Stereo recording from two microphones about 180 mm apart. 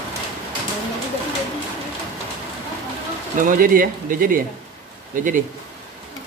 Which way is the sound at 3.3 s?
50° right (ahead or behind).